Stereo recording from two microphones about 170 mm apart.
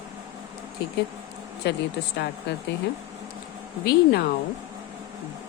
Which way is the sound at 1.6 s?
90° left.